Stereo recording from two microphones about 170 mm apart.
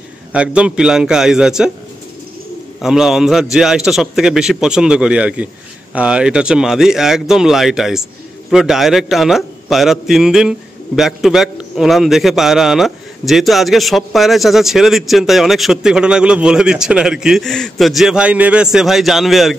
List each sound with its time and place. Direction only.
0.3 s a man's voice: 5° right (ahead or behind)
2.8 s a man's voice: 5° right (ahead or behind)